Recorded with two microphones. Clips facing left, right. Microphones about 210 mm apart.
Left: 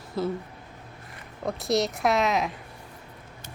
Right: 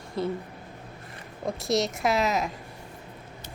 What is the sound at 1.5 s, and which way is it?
A woman's voice, centre (ahead or behind).